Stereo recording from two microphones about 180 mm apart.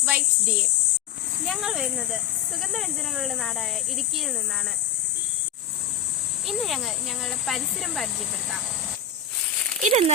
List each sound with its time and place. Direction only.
0.0 s insect: 10° right (ahead or behind)
1.5 s speech: centre (ahead or behind)
6.5 s speech: centre (ahead or behind)
9.8 s speech: 35° right (ahead or behind)